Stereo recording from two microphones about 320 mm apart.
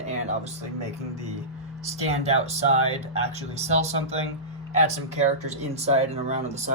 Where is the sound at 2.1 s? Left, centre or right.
Centre.